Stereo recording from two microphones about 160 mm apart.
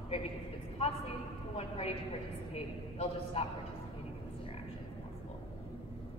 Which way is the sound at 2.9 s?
35° left (ahead or behind).